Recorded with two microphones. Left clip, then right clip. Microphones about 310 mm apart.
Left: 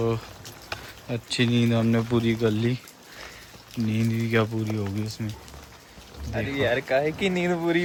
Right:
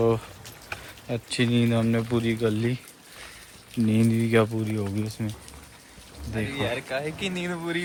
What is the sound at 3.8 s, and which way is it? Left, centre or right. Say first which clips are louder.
Speech: right 4 dB; centre.